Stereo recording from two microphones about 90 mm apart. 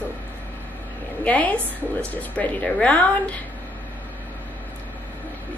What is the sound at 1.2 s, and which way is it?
A woman's voice, 15° left (ahead or behind).